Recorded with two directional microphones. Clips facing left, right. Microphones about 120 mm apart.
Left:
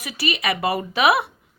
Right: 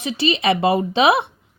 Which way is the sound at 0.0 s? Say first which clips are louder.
Right 6 dB; 25° right (ahead or behind).